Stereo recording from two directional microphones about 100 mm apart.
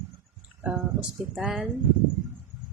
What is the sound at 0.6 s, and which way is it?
Speech, 10° right (ahead or behind).